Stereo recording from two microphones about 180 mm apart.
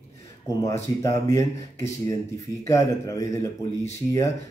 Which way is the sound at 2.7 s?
15° left (ahead or behind).